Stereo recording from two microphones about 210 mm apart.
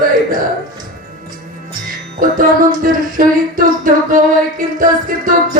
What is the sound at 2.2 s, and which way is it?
Music, 40° right (ahead or behind).